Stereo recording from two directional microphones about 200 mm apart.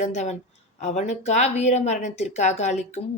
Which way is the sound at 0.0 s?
35° left (ahead or behind).